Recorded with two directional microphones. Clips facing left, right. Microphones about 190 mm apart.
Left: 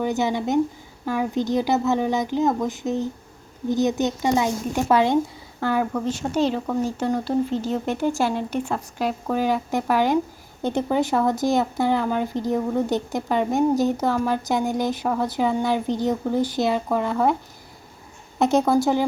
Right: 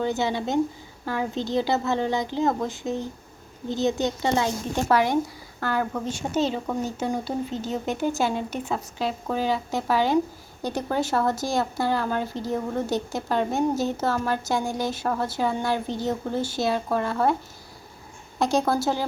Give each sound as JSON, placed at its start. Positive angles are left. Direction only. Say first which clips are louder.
{"t": 0.0, "sound": "a woman's voice", "louder": "left 2 dB", "side_deg": 15}
{"t": 5.8, "sound": "speech", "louder": "left 4 dB", "side_deg": 0}
{"t": 18.3, "sound": "a woman's voice", "louder": "left 4 dB", "side_deg": 20}